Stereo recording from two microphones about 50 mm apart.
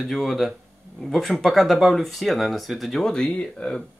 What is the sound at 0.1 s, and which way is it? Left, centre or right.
Speech, centre.